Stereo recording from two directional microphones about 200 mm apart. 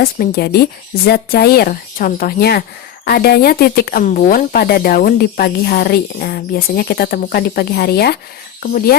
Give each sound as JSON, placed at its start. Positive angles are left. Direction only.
{"t": 0.0, "sound": "speech", "side_deg": 50}